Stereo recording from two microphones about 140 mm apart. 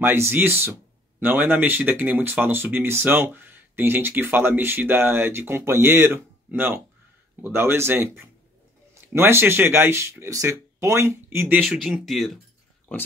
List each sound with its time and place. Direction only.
0.0 s speech: 15° right (ahead or behind)
11.6 s speech: centre (ahead or behind)